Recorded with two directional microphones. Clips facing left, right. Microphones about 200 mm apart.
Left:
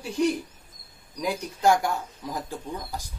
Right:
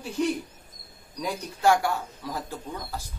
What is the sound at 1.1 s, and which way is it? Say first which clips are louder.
Speech: left 3 dB; 15° left (ahead or behind).